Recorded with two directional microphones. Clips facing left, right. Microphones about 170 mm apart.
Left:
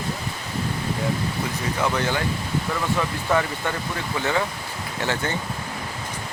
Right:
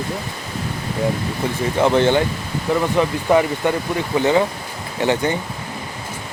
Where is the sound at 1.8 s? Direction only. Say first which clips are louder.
Right 9 dB; 25° right (ahead or behind).